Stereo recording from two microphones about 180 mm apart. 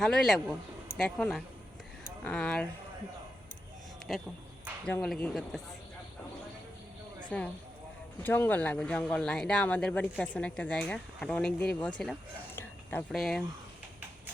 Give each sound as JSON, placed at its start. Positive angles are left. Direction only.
{"t": 0.0, "sound": "speech", "side_deg": 5}
{"t": 4.1, "sound": "speech", "side_deg": 0}
{"t": 7.3, "sound": "speech", "side_deg": 5}
{"t": 12.5, "sound": "a sound", "side_deg": 10}